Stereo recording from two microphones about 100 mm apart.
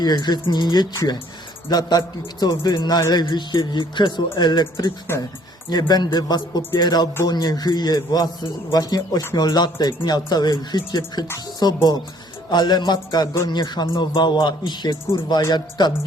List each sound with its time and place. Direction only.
0.0 s a man's voice: 45° left (ahead or behind)
5.1 s speech: 25° left (ahead or behind)
5.7 s a man's voice: 45° left (ahead or behind)
13.8 s a man's voice: 60° left (ahead or behind)